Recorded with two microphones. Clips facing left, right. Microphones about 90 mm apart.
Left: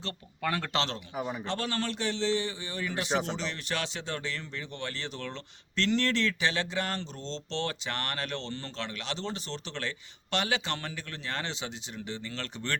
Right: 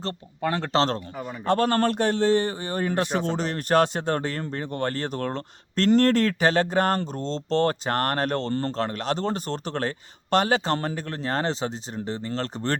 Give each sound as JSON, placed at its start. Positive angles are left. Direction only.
{"t": 0.4, "sound": "a man's voice", "side_deg": -30}
{"t": 1.5, "sound": "speech", "side_deg": -50}